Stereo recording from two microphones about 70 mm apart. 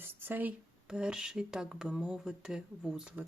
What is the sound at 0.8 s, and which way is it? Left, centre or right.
Speech, centre.